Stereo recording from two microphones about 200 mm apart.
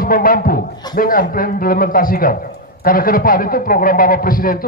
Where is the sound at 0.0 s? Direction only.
45° left (ahead or behind).